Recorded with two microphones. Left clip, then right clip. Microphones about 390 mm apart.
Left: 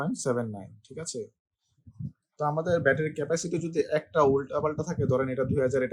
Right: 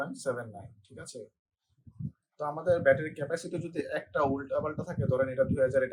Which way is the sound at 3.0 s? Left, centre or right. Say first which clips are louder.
Left 5 dB; left.